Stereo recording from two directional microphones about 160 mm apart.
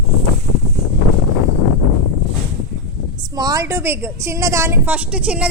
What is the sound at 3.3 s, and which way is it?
A woman's voice, 25° right (ahead or behind).